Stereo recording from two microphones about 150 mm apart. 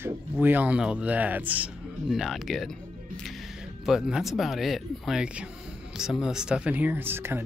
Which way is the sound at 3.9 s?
5° right (ahead or behind).